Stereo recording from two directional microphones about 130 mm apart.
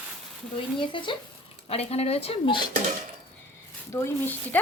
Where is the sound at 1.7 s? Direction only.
50° left (ahead or behind).